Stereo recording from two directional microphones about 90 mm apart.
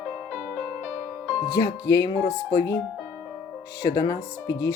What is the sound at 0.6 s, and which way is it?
Music, 15° left (ahead or behind).